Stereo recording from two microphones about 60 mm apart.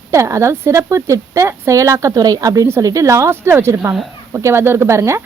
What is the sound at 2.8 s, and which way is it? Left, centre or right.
A woman's voice, right.